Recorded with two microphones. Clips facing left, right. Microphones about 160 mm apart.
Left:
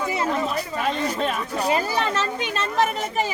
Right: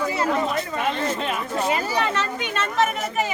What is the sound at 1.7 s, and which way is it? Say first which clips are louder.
A child's voice: left 2 dB; 30° left (ahead or behind).